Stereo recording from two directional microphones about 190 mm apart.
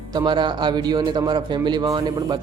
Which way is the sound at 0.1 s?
25° right (ahead or behind).